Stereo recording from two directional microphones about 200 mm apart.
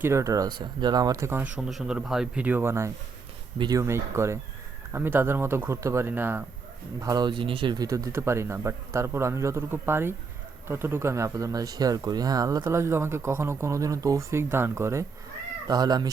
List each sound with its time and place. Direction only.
0.0 s speech: 15° right (ahead or behind)